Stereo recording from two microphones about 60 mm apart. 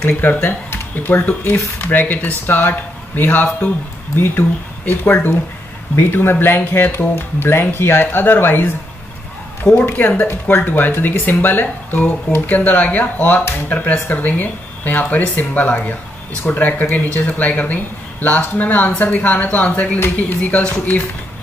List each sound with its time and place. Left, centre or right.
0.0 s speech: left